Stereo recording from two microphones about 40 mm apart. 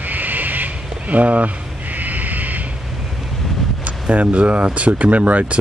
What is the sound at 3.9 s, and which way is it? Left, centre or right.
Speech, right.